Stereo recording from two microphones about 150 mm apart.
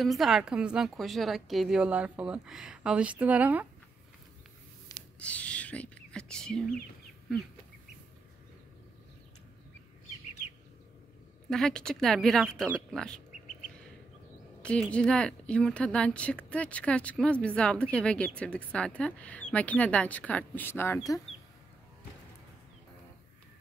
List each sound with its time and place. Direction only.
0.0 s a woman's voice: centre (ahead or behind)
4.9 s a sound: 25° left (ahead or behind)
5.2 s speech: 10° left (ahead or behind)
11.5 s a woman's voice: 5° left (ahead or behind)
14.6 s a woman's voice: 5° left (ahead or behind)